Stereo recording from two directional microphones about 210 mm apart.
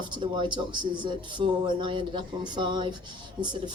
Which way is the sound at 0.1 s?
20° right (ahead or behind).